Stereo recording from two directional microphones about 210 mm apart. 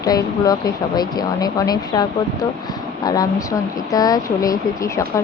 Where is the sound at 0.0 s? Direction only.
15° left (ahead or behind).